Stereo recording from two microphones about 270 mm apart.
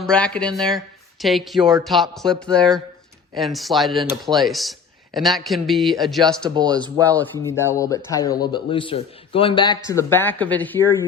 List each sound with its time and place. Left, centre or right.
0.0 s speech: centre
6.5 s speech: centre
7.1 s speech: centre